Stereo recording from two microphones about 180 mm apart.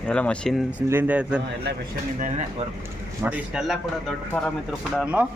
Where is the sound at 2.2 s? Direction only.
45° right (ahead or behind).